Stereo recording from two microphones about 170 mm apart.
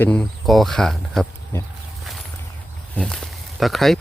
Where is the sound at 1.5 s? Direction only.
10° left (ahead or behind).